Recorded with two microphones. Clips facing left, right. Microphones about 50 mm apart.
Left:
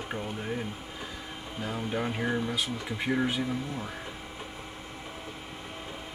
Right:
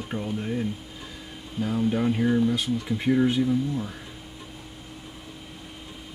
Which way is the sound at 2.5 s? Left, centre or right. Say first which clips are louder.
Right 6 dB; centre.